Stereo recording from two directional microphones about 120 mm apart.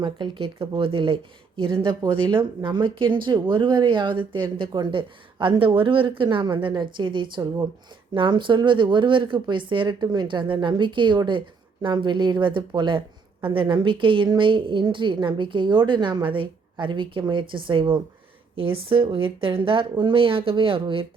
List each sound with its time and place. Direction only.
0.0 s speech: 45° right (ahead or behind)